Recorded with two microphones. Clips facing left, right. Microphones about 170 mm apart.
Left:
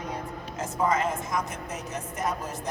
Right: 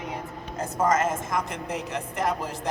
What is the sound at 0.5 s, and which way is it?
Speech, 35° right (ahead or behind).